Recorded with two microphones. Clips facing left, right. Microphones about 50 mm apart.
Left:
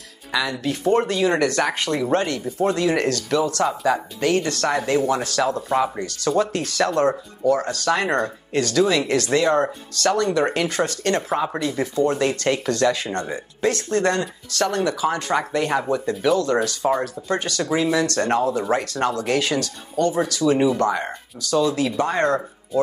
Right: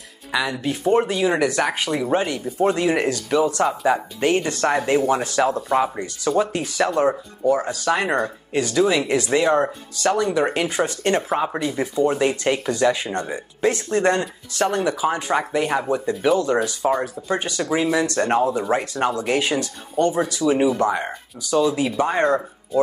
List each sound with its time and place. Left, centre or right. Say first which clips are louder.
0.3 s speech: even; centre